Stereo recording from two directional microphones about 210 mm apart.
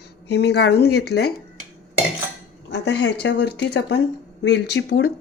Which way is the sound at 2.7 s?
55° left (ahead or behind).